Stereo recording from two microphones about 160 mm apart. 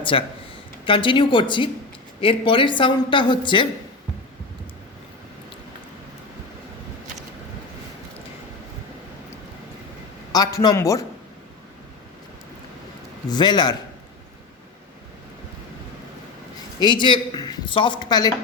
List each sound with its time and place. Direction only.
0.0 s a man's voice: 30° left (ahead or behind)
10.3 s speech: 25° left (ahead or behind)
13.3 s speech: 25° left (ahead or behind)
16.8 s speech: 30° left (ahead or behind)